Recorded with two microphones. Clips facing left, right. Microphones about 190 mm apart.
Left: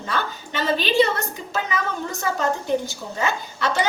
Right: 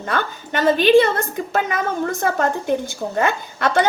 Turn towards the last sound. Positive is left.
turn(degrees=-55)  # may be behind; listen again after turning